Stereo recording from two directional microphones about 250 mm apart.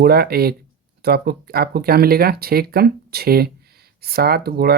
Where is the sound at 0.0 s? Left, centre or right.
Right.